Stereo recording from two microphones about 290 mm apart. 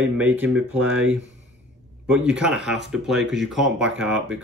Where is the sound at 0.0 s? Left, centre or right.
Centre.